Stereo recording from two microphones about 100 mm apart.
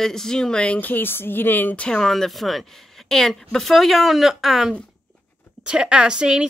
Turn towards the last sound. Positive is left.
turn(degrees=-10)  # may be behind; listen again after turning